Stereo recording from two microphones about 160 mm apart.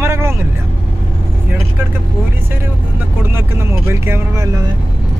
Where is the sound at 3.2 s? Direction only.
15° right (ahead or behind).